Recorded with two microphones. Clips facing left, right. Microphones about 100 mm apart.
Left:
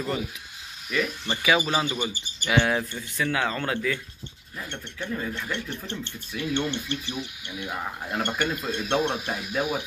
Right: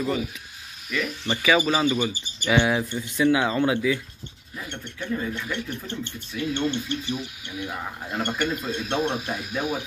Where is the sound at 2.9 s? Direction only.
20° right (ahead or behind).